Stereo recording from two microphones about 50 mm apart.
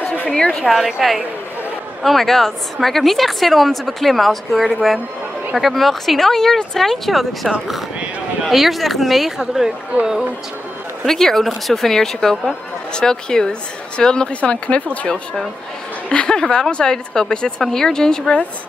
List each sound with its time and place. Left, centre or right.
0.3 s a sound: centre
0.7 s a woman's voice: centre
11.1 s speech: centre
16.1 s speech: centre